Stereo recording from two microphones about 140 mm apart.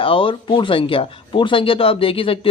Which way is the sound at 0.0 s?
40° left (ahead or behind).